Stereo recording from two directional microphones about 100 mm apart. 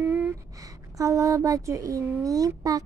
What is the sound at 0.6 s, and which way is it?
A child's voice, 35° right (ahead or behind).